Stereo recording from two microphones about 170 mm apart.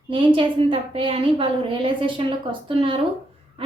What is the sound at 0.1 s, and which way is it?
A woman's voice, 30° right (ahead or behind).